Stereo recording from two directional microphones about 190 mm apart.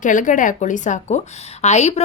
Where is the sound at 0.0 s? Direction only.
45° left (ahead or behind).